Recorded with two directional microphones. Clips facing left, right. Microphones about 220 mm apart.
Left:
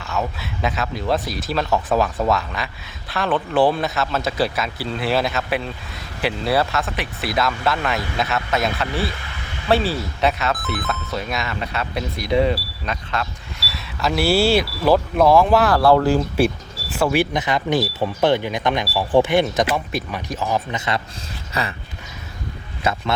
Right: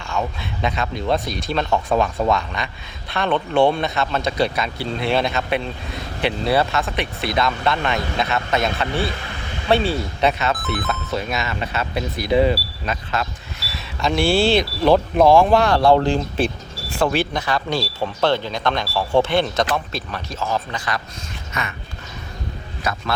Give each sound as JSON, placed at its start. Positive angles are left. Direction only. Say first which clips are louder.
{"t": 0.0, "sound": "speech", "louder": "even", "side_deg": 5}
{"t": 15.7, "sound": "speech", "louder": "even", "side_deg": -25}
{"t": 16.0, "sound": "speech", "louder": "left 3 dB", "side_deg": 5}
{"t": 21.5, "sound": "dog", "louder": "left 3 dB", "side_deg": 35}
{"t": 22.8, "sound": "a man's voice", "louder": "left 3 dB", "side_deg": 25}